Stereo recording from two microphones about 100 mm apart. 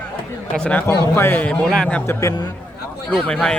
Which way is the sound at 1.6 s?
5° left (ahead or behind).